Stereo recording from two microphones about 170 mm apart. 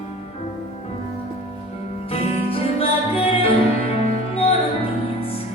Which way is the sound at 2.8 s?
35° left (ahead or behind).